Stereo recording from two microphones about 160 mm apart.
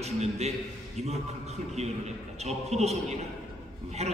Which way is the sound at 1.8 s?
45° right (ahead or behind).